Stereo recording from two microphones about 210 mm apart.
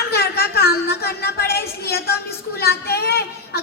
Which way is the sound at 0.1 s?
50° left (ahead or behind).